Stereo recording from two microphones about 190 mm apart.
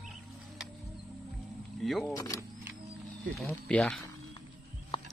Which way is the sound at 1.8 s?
Centre (ahead or behind).